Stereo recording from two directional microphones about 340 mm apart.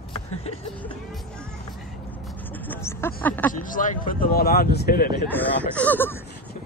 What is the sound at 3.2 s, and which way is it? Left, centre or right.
Vehicle, centre.